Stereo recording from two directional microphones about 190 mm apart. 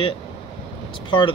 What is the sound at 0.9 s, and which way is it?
Speech, 25° left (ahead or behind).